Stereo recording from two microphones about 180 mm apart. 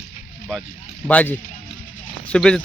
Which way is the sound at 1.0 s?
10° left (ahead or behind).